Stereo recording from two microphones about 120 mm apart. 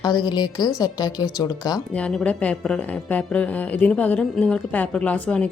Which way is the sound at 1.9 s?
10° left (ahead or behind).